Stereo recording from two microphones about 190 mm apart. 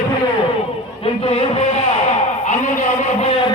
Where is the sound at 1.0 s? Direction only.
35° left (ahead or behind).